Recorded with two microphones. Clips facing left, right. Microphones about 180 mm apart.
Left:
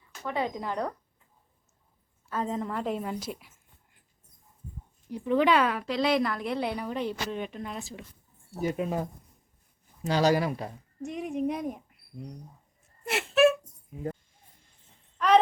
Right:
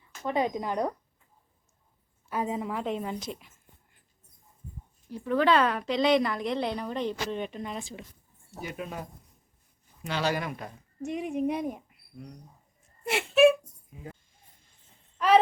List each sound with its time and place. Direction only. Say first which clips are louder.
0.3 s speech: right 3 dB; 15° right (ahead or behind)
2.3 s a woman's voice: even; 10° right (ahead or behind); by 3.5 s 5° left (ahead or behind)
5.1 s a woman's voice: even; 15° left (ahead or behind); by 8.0 s centre (ahead or behind)
8.7 s speech: left 5 dB; 25° left (ahead or behind)
10.1 s speech: left 6 dB; 40° left (ahead or behind)
11.0 s a woman's voice: right 1 dB; centre (ahead or behind)
13.1 s speech: right 2 dB; centre (ahead or behind)